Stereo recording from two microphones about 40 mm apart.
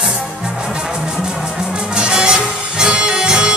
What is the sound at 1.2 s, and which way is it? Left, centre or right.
Music, right.